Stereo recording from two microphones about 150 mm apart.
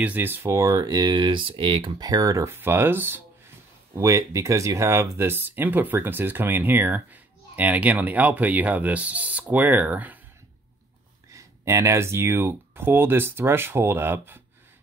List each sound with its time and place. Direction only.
0.0 s speech: 10° right (ahead or behind)
11.3 s speech: 20° right (ahead or behind)